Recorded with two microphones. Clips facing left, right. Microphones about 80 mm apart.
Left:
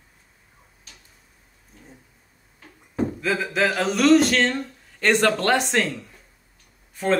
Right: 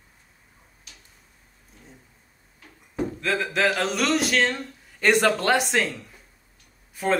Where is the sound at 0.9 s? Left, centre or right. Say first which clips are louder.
Left 1 dB; left.